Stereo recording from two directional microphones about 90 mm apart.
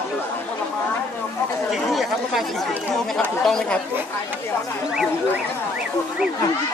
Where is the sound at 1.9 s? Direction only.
Centre (ahead or behind).